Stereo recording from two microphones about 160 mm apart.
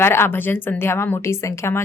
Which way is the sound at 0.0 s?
15° left (ahead or behind).